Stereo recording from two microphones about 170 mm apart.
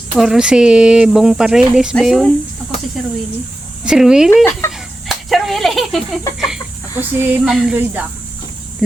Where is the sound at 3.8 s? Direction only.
5° right (ahead or behind).